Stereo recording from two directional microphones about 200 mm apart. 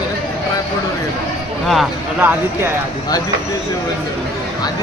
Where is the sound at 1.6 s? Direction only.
Centre (ahead or behind).